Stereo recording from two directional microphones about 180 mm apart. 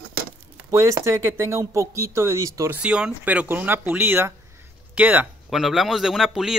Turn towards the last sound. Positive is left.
turn(degrees=0)  # may be behind; listen again after turning